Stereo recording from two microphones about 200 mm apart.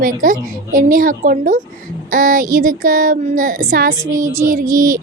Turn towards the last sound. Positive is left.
turn(degrees=-45)  # may be behind; listen again after turning